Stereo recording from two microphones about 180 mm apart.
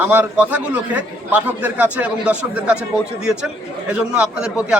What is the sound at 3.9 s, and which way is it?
Speech, 5° right (ahead or behind).